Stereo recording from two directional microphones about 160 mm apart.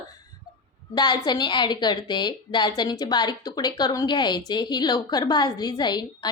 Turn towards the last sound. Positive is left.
turn(degrees=25)  # may be behind; listen again after turning